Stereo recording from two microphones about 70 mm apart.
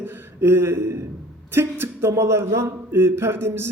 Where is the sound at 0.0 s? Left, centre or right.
Right.